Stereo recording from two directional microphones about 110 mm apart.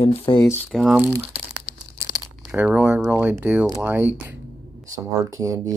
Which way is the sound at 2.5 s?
15° right (ahead or behind).